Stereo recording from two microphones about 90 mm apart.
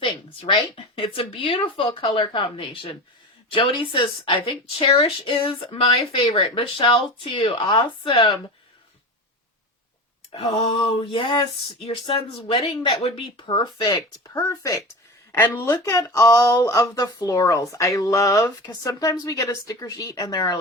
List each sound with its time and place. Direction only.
0.0 s speech: 70° left (ahead or behind)
3.5 s speech: 70° left (ahead or behind)
4.4 s a woman's voice: 90° left
5.7 s speech: 65° left (ahead or behind)
10.5 s speech: 80° left; by 14.0 s 55° left (ahead or behind)
14.3 s speech: 25° left (ahead or behind); by 20.6 s 45° left (ahead or behind)